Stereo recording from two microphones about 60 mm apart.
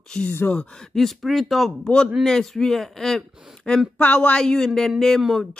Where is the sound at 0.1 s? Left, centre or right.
Centre.